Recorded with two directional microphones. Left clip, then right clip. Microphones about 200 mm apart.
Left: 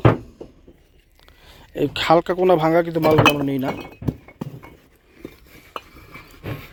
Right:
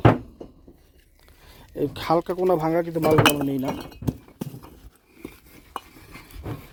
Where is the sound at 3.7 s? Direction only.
20° right (ahead or behind).